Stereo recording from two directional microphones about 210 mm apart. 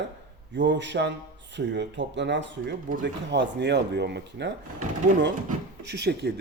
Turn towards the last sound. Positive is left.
turn(degrees=-50)  # may be behind; listen again after turning